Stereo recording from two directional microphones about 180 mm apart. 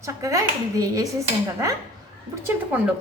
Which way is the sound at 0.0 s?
15° right (ahead or behind).